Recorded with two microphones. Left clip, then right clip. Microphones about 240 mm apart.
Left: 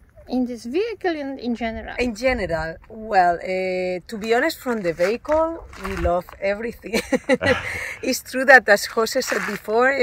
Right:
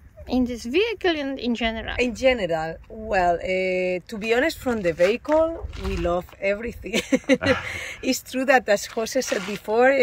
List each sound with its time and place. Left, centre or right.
0.3 s speech: centre
5.8 s speech: centre
6.0 s speech: centre
7.3 s a sound: left
8.1 s speech: centre